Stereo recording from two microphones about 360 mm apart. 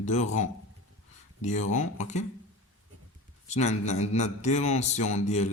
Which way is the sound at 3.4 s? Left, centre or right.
Centre.